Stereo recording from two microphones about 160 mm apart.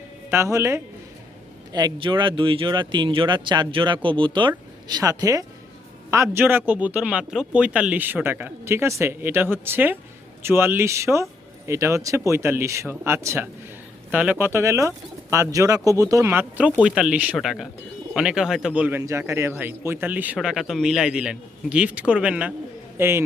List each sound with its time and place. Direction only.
0.3 s speech: 15° right (ahead or behind)